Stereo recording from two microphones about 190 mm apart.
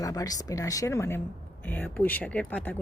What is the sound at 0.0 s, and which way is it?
Speech, 20° left (ahead or behind).